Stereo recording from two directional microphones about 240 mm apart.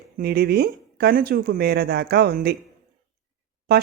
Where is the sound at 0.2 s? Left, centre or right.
Right.